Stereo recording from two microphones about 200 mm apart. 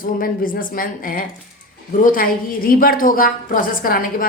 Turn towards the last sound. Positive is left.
turn(degrees=45)  # may be behind; listen again after turning